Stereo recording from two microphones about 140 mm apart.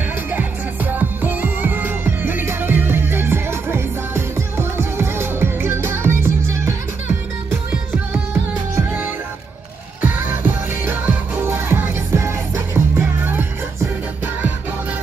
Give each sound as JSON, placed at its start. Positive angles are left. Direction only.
{"t": 0.3, "sound": "music", "side_deg": -15}
{"t": 8.7, "sound": "music", "side_deg": -15}